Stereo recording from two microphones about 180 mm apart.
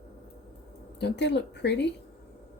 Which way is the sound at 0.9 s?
70° left (ahead or behind).